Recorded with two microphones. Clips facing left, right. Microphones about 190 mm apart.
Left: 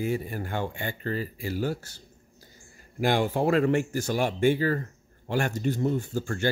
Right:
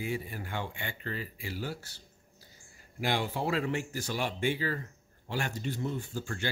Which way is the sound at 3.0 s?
50° left (ahead or behind).